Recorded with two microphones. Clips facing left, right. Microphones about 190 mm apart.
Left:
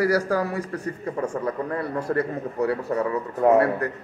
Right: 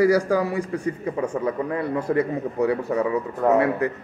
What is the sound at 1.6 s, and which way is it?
A man's voice, 15° right (ahead or behind).